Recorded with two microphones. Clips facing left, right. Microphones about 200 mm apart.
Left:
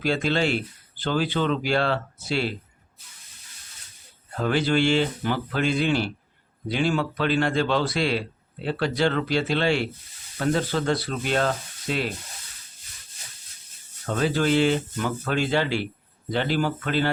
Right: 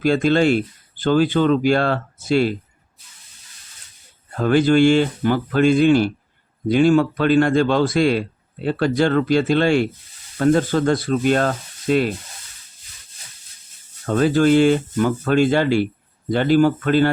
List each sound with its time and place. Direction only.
0.0 s speech: 50° right (ahead or behind)
4.4 s speech: 50° right (ahead or behind)
14.2 s speech: 50° right (ahead or behind)